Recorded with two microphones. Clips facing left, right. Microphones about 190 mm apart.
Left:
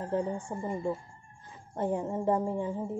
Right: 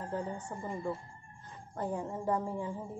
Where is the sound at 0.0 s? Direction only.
25° left (ahead or behind).